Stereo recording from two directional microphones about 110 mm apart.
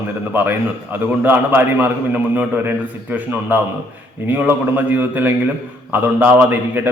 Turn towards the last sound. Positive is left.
turn(degrees=-15)  # may be behind; listen again after turning